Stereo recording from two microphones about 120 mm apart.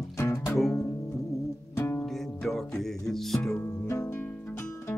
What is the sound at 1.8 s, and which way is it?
Music, 20° left (ahead or behind).